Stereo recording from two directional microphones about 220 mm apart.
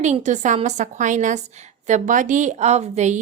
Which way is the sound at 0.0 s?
35° right (ahead or behind).